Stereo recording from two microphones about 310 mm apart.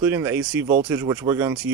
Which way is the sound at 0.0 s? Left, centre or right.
Centre.